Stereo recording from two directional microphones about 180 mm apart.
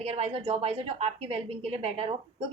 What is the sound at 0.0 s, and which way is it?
A woman's voice, 35° right (ahead or behind).